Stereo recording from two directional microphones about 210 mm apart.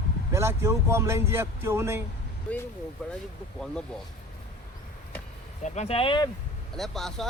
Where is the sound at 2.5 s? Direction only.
5° left (ahead or behind).